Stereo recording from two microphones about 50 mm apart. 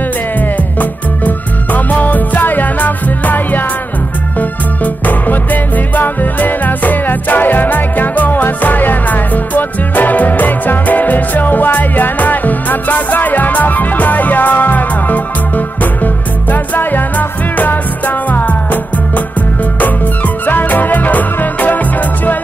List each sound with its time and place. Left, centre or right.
0.7 s music: left
20.4 s music: left